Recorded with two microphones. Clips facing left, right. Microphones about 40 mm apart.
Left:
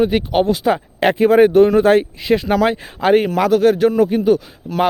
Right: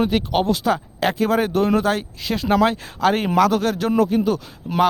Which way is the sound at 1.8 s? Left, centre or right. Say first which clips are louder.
Left 8 dB; left.